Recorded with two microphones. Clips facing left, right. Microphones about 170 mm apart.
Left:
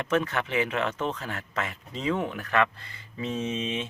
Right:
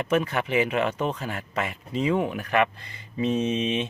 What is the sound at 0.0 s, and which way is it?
Speech, 10° right (ahead or behind).